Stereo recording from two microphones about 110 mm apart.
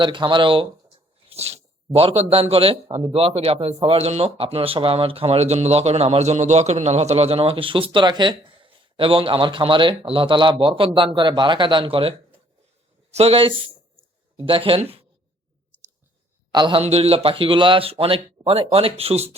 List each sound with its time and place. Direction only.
0.0 s speech: 45° right (ahead or behind)
1.3 s speech: 70° right (ahead or behind)
13.1 s speech: 65° right (ahead or behind)
14.3 s speech: 55° right (ahead or behind)
16.5 s a man's voice: 45° right (ahead or behind)
16.8 s speech: 70° right (ahead or behind)